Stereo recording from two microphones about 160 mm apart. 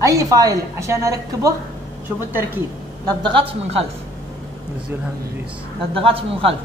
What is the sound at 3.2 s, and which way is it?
Speech, 30° right (ahead or behind).